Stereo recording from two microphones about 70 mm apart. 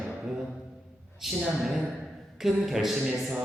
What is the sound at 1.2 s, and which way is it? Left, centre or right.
A man's voice, centre.